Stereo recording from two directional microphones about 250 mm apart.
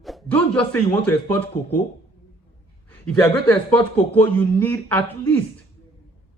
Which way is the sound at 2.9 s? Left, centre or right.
Centre.